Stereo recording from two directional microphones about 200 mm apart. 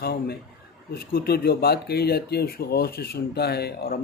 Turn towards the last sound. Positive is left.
turn(degrees=55)  # may be behind; listen again after turning